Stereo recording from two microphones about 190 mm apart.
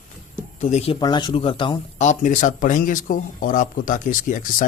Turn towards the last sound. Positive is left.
turn(degrees=45)  # may be behind; listen again after turning